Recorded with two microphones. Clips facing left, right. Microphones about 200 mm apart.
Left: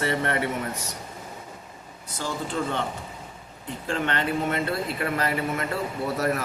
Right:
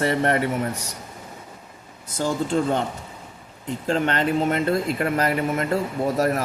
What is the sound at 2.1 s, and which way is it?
Speech, 45° right (ahead or behind).